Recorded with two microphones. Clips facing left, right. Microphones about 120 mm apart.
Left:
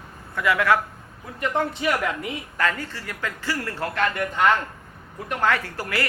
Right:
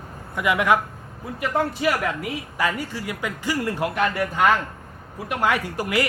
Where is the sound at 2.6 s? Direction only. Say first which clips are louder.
Right 1 dB; 10° right (ahead or behind).